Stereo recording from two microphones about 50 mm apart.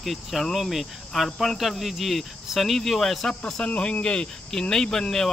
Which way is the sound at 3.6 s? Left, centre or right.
Centre.